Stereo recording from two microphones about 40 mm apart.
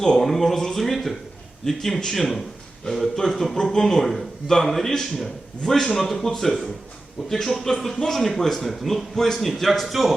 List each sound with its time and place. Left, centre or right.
0.0 s a man's voice: centre